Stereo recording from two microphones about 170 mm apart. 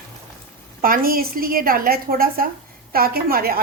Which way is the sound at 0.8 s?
60° right (ahead or behind).